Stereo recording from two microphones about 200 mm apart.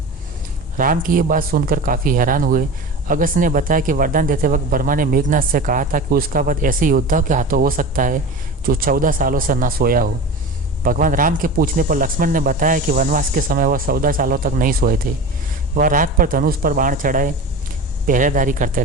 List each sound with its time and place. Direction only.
0.8 s speech: 45° right (ahead or behind)